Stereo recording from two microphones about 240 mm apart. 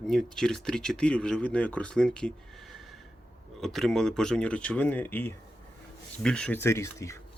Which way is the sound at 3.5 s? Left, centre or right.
Centre.